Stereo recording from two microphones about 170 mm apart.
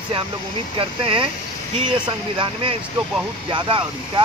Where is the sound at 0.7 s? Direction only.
30° right (ahead or behind).